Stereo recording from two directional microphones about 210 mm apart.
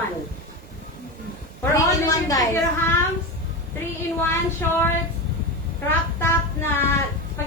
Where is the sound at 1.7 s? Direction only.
15° left (ahead or behind).